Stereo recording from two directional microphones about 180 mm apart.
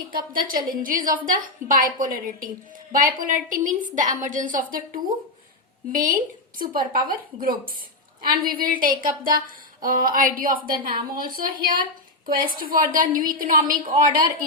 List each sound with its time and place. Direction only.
0.1 s a woman's voice: 50° right (ahead or behind)